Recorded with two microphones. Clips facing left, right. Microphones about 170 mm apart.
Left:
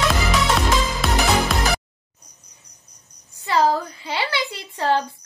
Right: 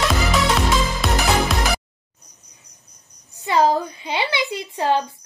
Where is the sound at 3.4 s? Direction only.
20° right (ahead or behind).